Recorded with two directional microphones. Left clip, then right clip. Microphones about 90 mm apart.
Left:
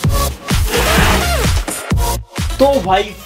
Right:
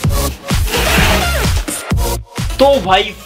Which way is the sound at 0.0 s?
Centre (ahead or behind).